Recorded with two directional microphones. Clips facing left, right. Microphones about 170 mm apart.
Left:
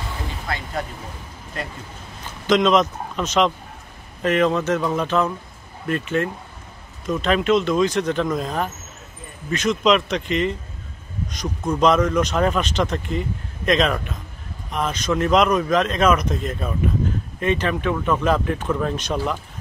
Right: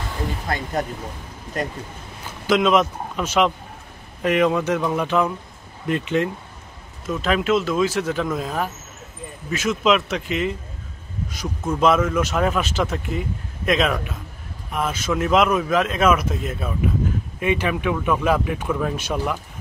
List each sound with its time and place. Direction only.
2.4 s speech: 10° right (ahead or behind)
7.1 s speech: 5° right (ahead or behind)